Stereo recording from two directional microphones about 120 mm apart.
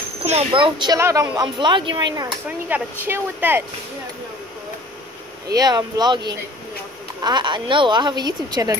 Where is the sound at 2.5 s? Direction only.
15° right (ahead or behind).